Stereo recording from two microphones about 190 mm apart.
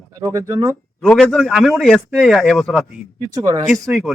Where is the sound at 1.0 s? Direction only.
5° left (ahead or behind).